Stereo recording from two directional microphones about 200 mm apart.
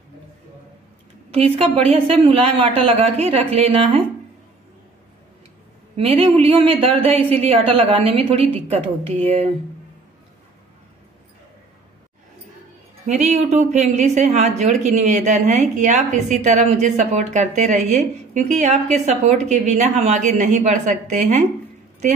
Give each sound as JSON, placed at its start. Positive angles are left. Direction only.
{"t": 1.3, "sound": "a woman's voice", "side_deg": -30}
{"t": 5.9, "sound": "a woman's voice", "side_deg": -30}
{"t": 13.0, "sound": "speech", "side_deg": -35}